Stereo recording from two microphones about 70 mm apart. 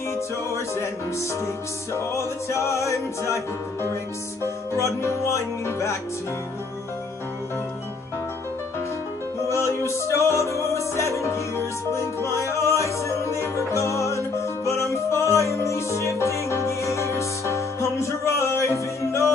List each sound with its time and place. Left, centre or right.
0.1 s music: left
9.5 s music: left